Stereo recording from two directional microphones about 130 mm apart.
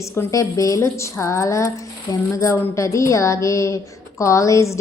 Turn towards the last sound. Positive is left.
turn(degrees=25)  # may be behind; listen again after turning